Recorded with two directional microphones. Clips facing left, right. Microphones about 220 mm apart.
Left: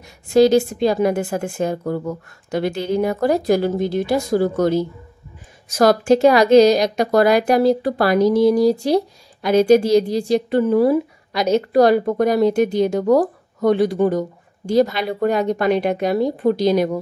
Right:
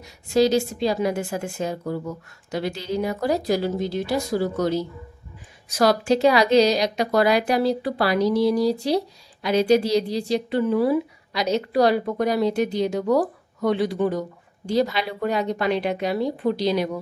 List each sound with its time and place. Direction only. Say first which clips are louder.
0.0 s a woman's voice: left 6 dB; 50° left (ahead or behind)